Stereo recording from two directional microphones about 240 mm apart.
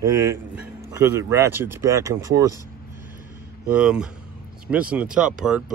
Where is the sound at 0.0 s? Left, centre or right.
Centre.